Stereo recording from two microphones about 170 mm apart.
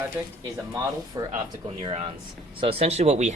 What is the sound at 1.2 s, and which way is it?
Speech, 20° right (ahead or behind).